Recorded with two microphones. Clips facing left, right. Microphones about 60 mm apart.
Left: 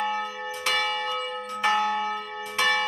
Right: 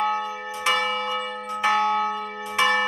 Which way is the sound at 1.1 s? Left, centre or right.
Centre.